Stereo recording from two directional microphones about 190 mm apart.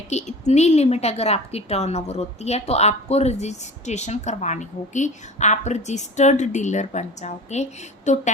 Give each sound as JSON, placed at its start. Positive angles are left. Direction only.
{"t": 0.1, "sound": "a woman's voice", "side_deg": 35}